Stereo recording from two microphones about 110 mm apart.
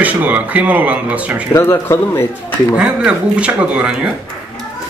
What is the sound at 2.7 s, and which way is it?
Speech, 10° right (ahead or behind).